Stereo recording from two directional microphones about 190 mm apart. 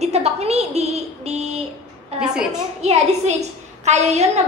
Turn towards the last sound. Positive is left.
turn(degrees=-35)  # may be behind; listen again after turning